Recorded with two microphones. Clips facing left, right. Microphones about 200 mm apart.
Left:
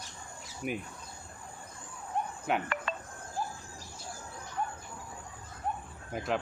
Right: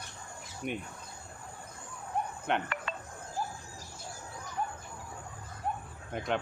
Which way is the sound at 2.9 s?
45° left (ahead or behind).